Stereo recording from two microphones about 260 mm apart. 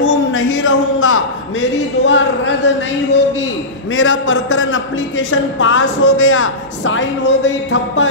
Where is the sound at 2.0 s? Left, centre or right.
Left.